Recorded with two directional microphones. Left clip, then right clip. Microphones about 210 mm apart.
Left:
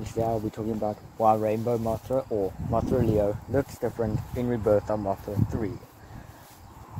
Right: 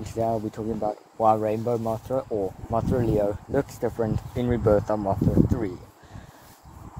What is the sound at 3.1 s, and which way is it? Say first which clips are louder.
Speech: right 1 dB; 15° right (ahead or behind).